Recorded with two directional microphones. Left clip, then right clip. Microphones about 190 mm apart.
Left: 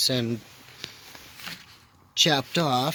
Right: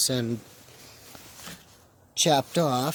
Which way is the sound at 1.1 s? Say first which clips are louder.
Left 2 dB; 25° right (ahead or behind).